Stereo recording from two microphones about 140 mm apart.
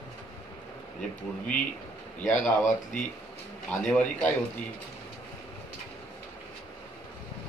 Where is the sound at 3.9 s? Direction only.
10° left (ahead or behind).